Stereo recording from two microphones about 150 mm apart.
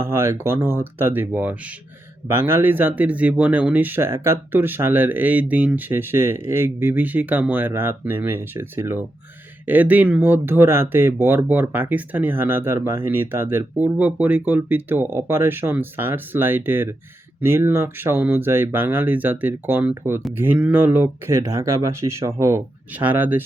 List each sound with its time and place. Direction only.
0.0 s speech: 15° right (ahead or behind)